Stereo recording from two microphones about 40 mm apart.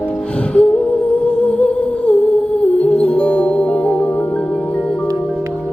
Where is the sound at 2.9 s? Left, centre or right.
Left.